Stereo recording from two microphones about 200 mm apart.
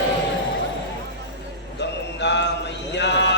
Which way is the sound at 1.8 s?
60° left (ahead or behind).